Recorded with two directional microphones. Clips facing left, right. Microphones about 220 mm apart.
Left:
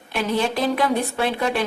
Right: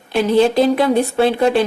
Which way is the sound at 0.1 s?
30° right (ahead or behind).